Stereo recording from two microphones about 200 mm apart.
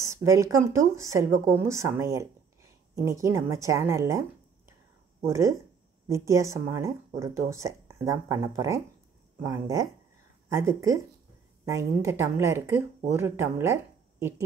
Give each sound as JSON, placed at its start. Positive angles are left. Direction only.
{"t": 0.0, "sound": "speech", "side_deg": -15}
{"t": 5.2, "sound": "speech", "side_deg": -15}